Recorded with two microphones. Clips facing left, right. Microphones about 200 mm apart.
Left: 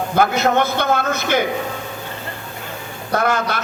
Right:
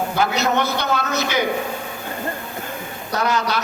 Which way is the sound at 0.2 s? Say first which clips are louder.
Left 4 dB; 50° left (ahead or behind).